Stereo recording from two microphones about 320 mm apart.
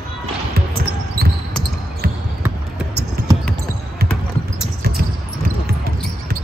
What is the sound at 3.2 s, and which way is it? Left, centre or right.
Basketball bounce, right.